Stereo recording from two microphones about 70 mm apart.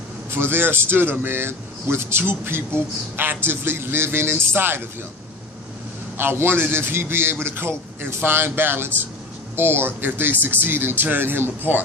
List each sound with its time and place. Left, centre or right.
0.3 s speech: right
6.1 s speech: right